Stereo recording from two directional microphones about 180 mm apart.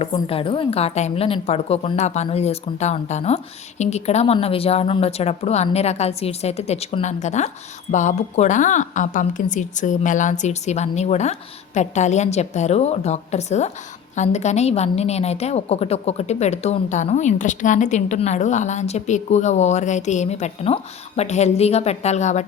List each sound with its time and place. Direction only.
0.0 s a woman's voice: 30° left (ahead or behind)